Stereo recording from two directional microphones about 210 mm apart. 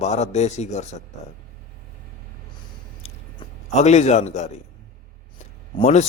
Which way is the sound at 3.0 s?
30° left (ahead or behind).